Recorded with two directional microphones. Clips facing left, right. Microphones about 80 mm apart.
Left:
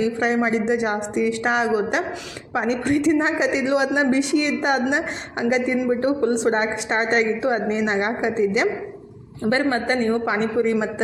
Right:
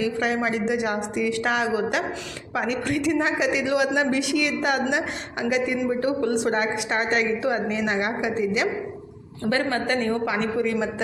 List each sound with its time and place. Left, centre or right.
0.0 s a woman's voice: left